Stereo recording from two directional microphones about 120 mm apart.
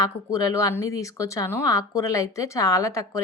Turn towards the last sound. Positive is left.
turn(degrees=30)  # may be behind; listen again after turning